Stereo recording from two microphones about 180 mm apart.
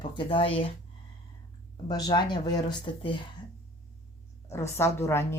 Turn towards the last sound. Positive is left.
turn(degrees=15)  # may be behind; listen again after turning